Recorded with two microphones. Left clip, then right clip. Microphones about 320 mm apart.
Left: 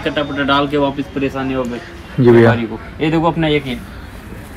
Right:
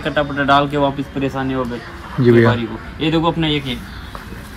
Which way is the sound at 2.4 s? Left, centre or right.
Centre.